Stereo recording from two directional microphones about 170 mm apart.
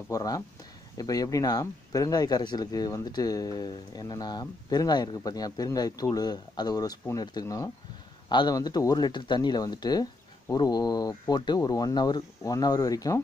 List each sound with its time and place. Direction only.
0.1 s speech: 20° left (ahead or behind)